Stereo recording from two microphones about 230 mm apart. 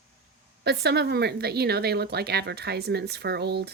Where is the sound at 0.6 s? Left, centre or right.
Right.